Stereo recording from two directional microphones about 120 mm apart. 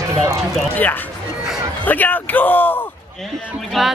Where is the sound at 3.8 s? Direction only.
Centre (ahead or behind).